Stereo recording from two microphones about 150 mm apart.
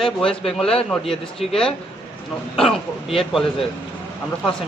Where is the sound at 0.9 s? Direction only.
Centre (ahead or behind).